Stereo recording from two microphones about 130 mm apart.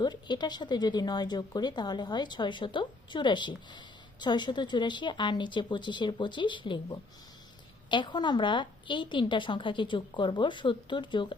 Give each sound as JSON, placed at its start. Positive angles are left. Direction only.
{"t": 0.0, "sound": "speech", "side_deg": 35}